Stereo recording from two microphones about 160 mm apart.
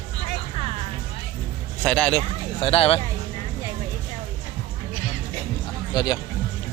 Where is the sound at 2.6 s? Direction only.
35° left (ahead or behind).